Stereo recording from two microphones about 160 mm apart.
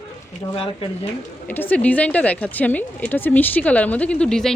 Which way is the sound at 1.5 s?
10° left (ahead or behind).